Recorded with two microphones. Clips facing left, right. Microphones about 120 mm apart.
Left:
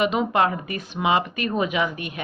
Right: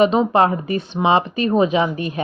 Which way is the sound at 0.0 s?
35° right (ahead or behind).